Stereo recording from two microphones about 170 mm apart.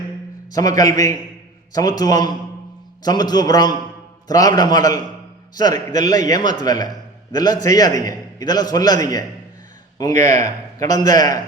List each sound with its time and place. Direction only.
0.5 s a man's voice: 20° left (ahead or behind)
10.2 s a man's voice: 45° right (ahead or behind)
10.8 s a man's voice: 20° left (ahead or behind)